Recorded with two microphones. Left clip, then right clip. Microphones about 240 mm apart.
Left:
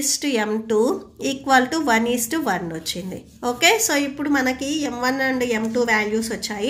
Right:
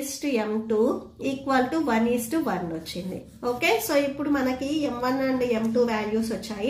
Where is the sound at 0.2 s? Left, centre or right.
Left.